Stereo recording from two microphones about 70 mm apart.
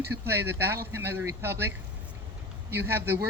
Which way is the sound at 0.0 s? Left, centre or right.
Right.